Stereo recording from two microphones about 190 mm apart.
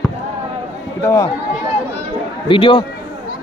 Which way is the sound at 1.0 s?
15° left (ahead or behind).